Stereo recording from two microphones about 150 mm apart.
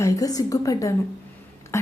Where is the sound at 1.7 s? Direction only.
20° left (ahead or behind).